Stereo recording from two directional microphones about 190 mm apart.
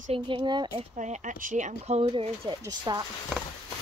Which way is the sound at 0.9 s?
40° right (ahead or behind).